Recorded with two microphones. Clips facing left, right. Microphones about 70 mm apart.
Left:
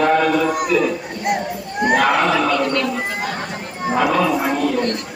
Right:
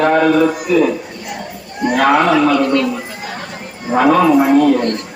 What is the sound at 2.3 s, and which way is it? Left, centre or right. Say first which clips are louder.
Speech: right 5 dB; centre.